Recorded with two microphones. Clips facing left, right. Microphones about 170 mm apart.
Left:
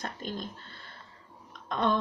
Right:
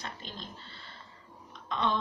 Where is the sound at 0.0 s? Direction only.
50° left (ahead or behind).